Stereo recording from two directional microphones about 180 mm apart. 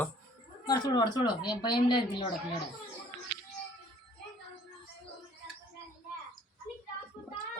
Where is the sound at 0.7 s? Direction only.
25° left (ahead or behind).